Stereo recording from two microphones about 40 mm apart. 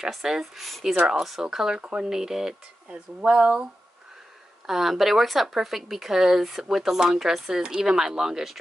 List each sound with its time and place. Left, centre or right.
0.2 s speech: centre
0.6 s speech: centre
1.5 s speech: centre
1.8 s speech: right
2.0 s speech: centre
2.9 s speech: right
4.6 s speech: centre